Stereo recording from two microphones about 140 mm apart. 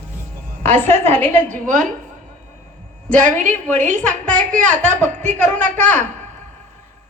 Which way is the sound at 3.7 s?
65° right (ahead or behind).